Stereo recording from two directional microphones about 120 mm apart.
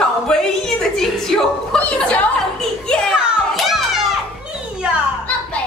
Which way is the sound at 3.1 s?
5° right (ahead or behind).